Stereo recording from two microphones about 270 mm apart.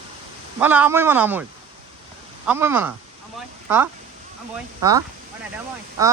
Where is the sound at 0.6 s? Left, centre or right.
Centre.